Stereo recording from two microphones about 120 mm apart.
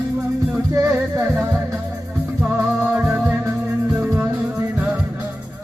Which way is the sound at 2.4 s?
15° right (ahead or behind).